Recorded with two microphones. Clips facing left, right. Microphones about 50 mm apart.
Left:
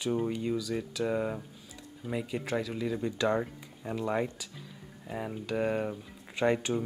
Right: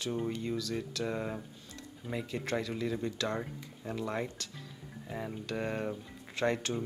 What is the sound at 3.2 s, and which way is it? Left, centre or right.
Speech, centre.